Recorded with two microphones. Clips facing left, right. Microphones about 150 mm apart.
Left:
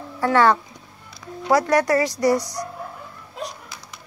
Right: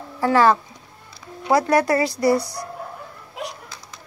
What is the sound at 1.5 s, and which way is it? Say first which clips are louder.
Speech: even; 25° right (ahead or behind).